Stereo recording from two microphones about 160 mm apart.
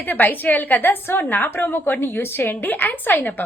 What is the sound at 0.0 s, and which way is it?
A woman's voice, 10° left (ahead or behind).